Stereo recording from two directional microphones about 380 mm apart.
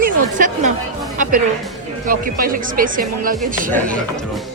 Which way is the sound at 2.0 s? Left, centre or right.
Right.